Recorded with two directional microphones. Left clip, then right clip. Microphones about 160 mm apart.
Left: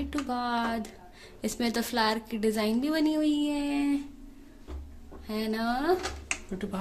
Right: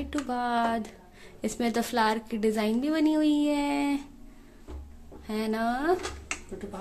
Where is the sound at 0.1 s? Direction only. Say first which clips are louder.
Right 3 dB; 10° right (ahead or behind).